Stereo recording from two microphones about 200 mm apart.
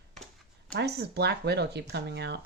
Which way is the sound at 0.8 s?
55° right (ahead or behind).